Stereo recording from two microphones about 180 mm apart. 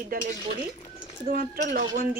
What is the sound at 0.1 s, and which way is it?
Speech, 55° right (ahead or behind).